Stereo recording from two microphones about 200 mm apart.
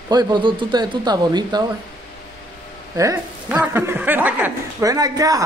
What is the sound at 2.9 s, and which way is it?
A woman's voice, 15° right (ahead or behind).